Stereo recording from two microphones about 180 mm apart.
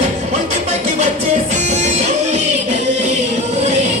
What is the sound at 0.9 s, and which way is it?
Music, 40° right (ahead or behind).